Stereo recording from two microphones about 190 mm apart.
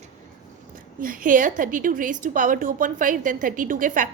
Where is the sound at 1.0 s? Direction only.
45° right (ahead or behind).